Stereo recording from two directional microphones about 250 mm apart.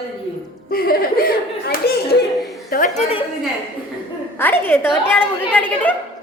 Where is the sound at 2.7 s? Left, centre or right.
Left.